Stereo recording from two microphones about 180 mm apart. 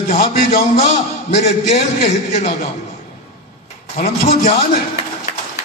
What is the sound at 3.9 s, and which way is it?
Speech, 40° left (ahead or behind).